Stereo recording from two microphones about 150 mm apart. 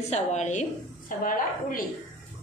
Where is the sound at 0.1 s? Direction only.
50° left (ahead or behind); by 1.9 s 65° left (ahead or behind).